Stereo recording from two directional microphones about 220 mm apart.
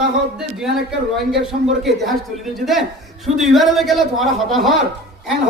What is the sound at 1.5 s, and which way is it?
Speech, 40° right (ahead or behind).